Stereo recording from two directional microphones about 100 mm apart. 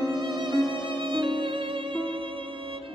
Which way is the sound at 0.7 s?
50° right (ahead or behind).